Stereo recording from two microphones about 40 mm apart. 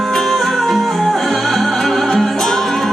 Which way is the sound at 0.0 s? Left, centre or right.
Centre.